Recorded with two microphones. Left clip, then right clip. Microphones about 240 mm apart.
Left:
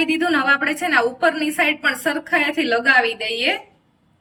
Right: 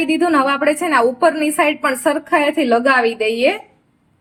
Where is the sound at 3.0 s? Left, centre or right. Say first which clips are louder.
Right 5 dB; right.